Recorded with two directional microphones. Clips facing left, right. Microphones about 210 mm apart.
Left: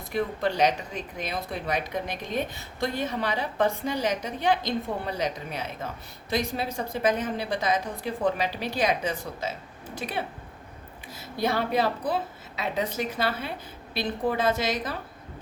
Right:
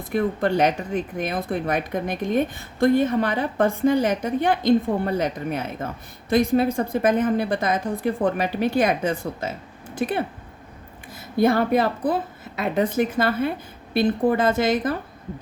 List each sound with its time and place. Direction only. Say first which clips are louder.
0.0 s speech: right 5 dB; 50° right (ahead or behind)